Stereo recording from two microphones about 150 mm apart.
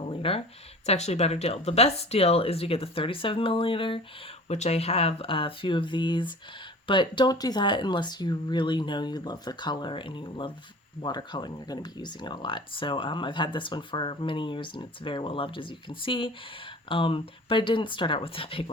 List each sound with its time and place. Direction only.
0.0 s a sound: 40° left (ahead or behind)
0.9 s speech: 50° left (ahead or behind)
4.4 s speech: 50° left (ahead or behind)